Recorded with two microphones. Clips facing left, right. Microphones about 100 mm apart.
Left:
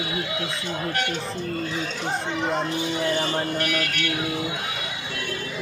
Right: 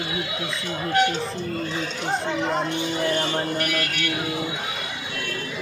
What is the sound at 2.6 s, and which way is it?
Speech, centre (ahead or behind).